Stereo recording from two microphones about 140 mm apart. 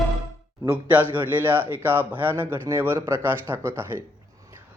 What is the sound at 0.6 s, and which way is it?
Speech, 10° right (ahead or behind).